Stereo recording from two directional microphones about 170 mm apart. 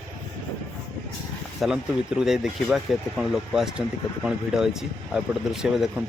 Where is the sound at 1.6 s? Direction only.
Centre (ahead or behind).